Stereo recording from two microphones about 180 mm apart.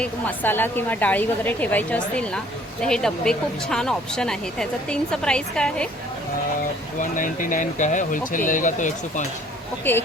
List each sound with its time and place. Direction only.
0.0 s a woman's voice: 10° left (ahead or behind)
7.0 s speech: 50° left (ahead or behind)
9.9 s a woman's voice: 10° left (ahead or behind)